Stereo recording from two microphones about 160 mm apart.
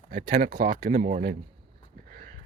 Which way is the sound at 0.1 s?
55° right (ahead or behind).